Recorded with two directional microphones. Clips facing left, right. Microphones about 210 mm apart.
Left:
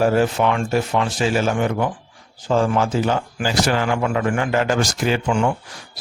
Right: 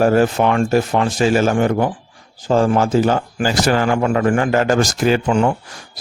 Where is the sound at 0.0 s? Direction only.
45° right (ahead or behind).